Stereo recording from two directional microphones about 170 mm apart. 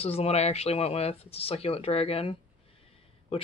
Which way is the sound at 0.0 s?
35° left (ahead or behind).